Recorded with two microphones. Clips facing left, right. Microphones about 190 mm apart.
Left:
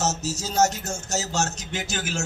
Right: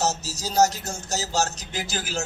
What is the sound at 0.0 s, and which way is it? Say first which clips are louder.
A man's voice: even; 35° right (ahead or behind).